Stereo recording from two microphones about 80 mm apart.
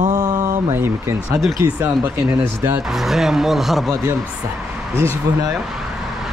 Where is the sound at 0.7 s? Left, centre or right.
Right.